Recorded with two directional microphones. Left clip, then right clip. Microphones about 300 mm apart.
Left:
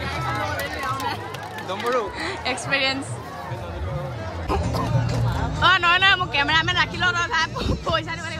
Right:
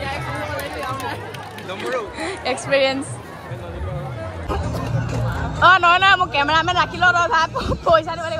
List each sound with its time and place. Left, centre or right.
1.7 s a sound: left
2.1 s a woman's voice: centre
5.6 s a man's voice: centre